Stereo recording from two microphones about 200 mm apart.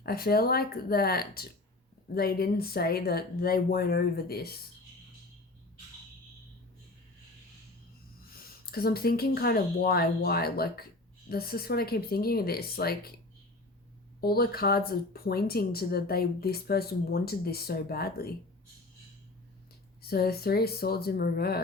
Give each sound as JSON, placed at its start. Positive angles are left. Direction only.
{"t": 0.0, "sound": "speech", "side_deg": 50}
{"t": 8.4, "sound": "speech", "side_deg": 50}
{"t": 14.2, "sound": "speech", "side_deg": 50}
{"t": 20.0, "sound": "speech", "side_deg": 50}